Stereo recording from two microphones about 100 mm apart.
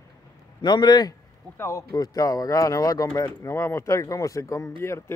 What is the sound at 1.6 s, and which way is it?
Speech, 30° left (ahead or behind).